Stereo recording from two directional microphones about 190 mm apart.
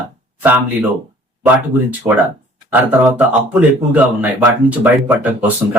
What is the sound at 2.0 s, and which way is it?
Speech, 15° right (ahead or behind).